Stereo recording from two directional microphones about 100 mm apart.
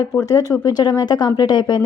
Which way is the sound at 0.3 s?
40° left (ahead or behind).